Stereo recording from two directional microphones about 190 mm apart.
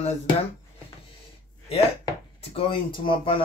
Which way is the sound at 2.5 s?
30° left (ahead or behind).